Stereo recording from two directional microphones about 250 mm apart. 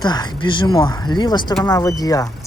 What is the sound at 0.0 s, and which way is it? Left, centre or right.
Speech, centre.